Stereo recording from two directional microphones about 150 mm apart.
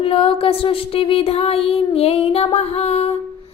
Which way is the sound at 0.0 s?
40° left (ahead or behind).